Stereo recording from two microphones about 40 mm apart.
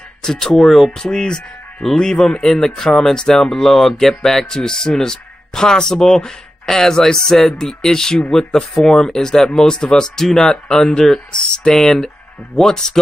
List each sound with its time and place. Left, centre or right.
0.2 s speech: centre